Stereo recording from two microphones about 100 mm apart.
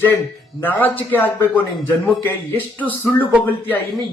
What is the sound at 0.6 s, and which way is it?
A man's voice, 20° left (ahead or behind).